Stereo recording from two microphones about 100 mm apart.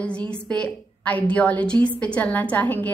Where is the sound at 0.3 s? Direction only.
10° left (ahead or behind).